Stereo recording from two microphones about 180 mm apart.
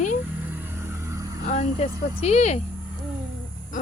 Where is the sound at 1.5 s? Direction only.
40° left (ahead or behind).